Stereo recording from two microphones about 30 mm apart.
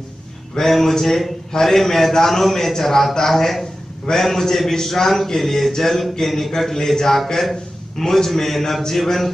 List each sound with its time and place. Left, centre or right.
0.6 s a man's voice: centre